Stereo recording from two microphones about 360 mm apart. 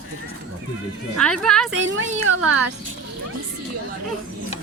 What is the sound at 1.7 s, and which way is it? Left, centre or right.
Speech, right.